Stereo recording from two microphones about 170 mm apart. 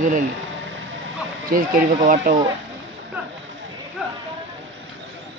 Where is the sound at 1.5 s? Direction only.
45° right (ahead or behind).